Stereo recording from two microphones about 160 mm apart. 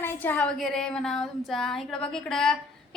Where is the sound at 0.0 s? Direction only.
10° left (ahead or behind).